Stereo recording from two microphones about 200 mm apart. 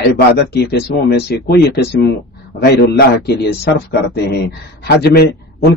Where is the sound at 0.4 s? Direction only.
55° left (ahead or behind).